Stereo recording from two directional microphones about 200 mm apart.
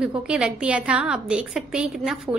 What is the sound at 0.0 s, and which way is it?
A woman's voice, 5° right (ahead or behind).